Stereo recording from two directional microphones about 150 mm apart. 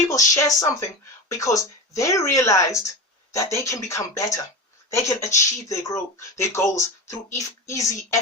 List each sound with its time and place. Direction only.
0.1 s speech: 20° left (ahead or behind)